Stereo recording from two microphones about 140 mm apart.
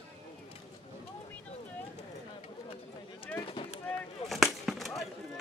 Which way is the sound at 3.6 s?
35° left (ahead or behind).